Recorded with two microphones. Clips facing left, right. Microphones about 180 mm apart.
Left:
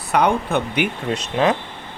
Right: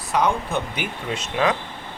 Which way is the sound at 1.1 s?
35° left (ahead or behind).